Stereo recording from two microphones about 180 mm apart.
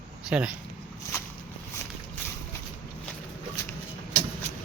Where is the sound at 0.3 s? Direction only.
5° right (ahead or behind).